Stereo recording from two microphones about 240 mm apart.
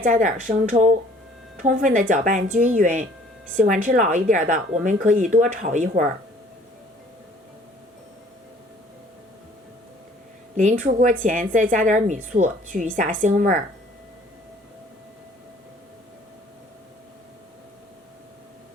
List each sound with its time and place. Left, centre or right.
0.0 s a woman's voice: right
10.6 s a woman's voice: right